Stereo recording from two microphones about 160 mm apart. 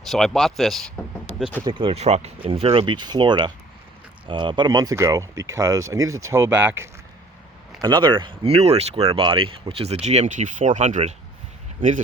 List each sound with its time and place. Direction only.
0.0 s speech: centre (ahead or behind)
1.6 s speech: 35° right (ahead or behind); by 6.8 s 10° right (ahead or behind)
7.8 s speech: 25° right (ahead or behind); by 11.1 s 50° right (ahead or behind)